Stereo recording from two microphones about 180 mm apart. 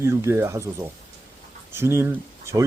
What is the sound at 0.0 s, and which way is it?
Speech, 15° right (ahead or behind).